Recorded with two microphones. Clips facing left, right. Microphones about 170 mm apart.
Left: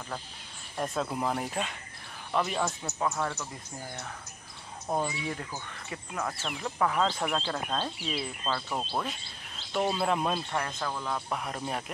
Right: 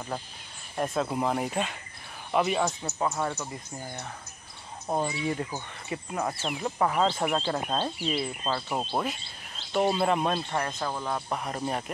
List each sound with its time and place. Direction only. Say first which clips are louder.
0.7 s speech: right 3 dB; 5° right (ahead or behind)
4.8 s speech: right 3 dB; 10° right (ahead or behind)
8.0 s speech: right 5 dB; centre (ahead or behind)
8.5 s speech: even; 15° right (ahead or behind)
9.8 s speech: right 3 dB; centre (ahead or behind)
10.6 s speech: right 3 dB; 15° right (ahead or behind)
11.3 s speech: right 3 dB; centre (ahead or behind)